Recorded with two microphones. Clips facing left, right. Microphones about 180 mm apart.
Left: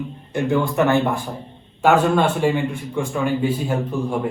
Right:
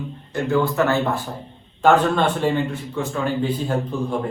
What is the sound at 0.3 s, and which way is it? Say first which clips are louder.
A man's voice: left 1 dB; 15° left (ahead or behind).